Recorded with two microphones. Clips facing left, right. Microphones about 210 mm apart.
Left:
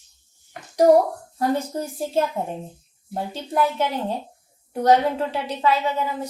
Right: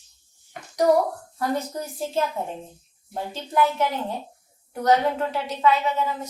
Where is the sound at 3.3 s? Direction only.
30° left (ahead or behind).